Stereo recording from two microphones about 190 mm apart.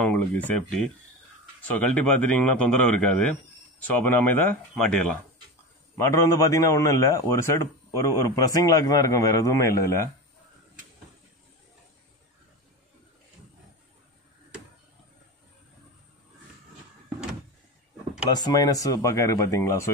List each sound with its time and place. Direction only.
0.0 s a man's voice: 5° left (ahead or behind)
5.9 s a man's voice: 15° left (ahead or behind)
18.3 s a man's voice: 20° left (ahead or behind)